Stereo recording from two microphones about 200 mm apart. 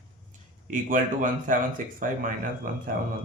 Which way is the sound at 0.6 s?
40° right (ahead or behind).